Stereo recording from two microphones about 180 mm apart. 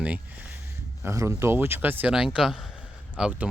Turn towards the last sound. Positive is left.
turn(degrees=-5)  # may be behind; listen again after turning